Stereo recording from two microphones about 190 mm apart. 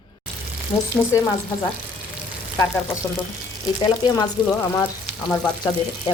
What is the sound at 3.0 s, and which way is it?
Speech, 15° left (ahead or behind).